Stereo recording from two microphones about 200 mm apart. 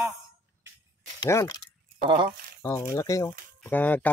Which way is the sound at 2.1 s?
25° right (ahead or behind).